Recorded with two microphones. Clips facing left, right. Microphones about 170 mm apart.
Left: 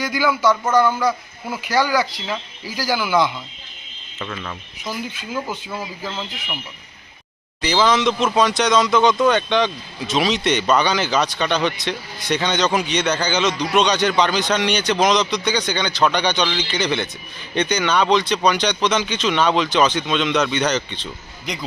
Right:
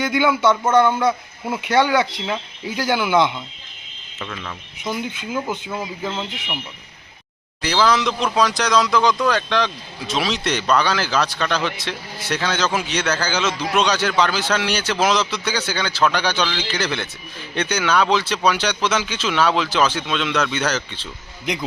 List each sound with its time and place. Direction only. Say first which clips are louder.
0.0 s speech: right 1 dB; 25° right (ahead or behind)
4.2 s speech: left 2 dB; centre (ahead or behind)
4.8 s speech: right 3 dB; 20° right (ahead or behind)
7.6 s speech: left 1 dB; centre (ahead or behind)